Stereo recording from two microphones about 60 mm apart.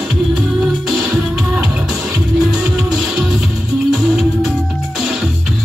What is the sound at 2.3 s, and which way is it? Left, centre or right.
Music, centre.